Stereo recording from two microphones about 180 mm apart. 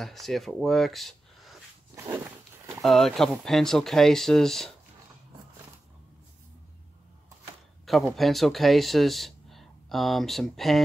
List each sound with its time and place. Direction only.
0.0 s speech: centre (ahead or behind)
2.0 s walk: 15° right (ahead or behind)
2.8 s speech: centre (ahead or behind)
7.8 s speech: centre (ahead or behind)